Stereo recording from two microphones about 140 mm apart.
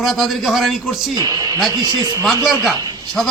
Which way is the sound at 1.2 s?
30° right (ahead or behind).